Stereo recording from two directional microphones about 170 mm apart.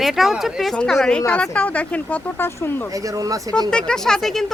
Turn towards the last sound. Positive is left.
turn(degrees=0)  # may be behind; listen again after turning